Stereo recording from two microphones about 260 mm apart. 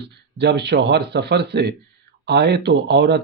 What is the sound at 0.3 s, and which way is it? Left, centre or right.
Speech, right.